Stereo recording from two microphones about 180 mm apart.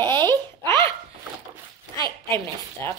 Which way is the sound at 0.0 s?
25° right (ahead or behind).